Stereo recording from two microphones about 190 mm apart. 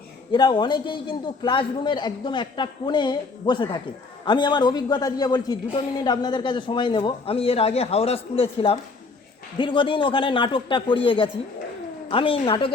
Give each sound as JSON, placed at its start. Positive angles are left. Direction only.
{"t": 0.3, "sound": "a man's voice", "side_deg": 25}